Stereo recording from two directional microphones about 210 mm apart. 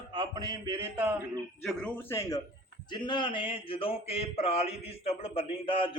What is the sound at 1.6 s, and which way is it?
Speech, 5° left (ahead or behind).